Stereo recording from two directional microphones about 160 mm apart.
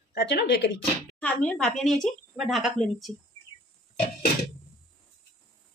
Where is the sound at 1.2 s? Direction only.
10° left (ahead or behind).